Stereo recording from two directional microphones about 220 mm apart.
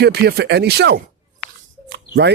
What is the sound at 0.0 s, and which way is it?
Speech, 50° right (ahead or behind).